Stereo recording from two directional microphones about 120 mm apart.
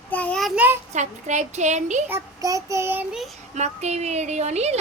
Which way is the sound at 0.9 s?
75° right (ahead or behind).